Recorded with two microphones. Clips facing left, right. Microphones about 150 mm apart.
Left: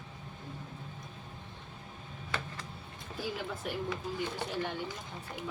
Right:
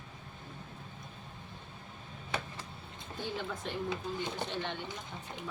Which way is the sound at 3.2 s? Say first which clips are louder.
Left 1 dB; 5° left (ahead or behind).